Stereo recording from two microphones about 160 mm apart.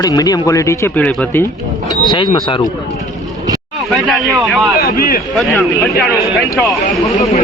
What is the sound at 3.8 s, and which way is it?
Speech, centre (ahead or behind).